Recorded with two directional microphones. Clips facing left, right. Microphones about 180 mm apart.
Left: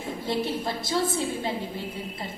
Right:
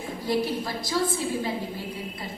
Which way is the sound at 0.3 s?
25° left (ahead or behind).